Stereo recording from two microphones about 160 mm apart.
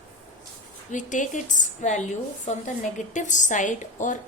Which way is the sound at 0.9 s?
50° left (ahead or behind).